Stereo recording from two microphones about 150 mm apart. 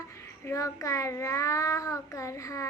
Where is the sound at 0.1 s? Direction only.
20° left (ahead or behind).